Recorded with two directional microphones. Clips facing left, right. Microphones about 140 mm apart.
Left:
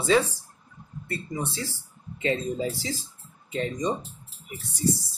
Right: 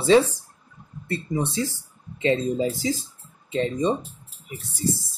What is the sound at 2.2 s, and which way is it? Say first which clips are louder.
Speech: right 5 dB; 30° right (ahead or behind).